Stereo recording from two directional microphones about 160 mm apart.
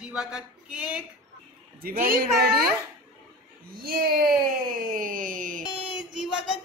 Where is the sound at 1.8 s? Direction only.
60° right (ahead or behind).